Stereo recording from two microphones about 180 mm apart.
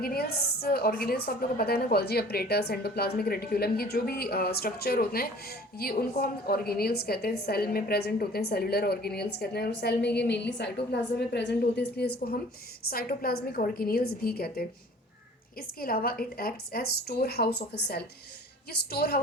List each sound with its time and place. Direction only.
0.0 s a woman's voice: 60° left (ahead or behind)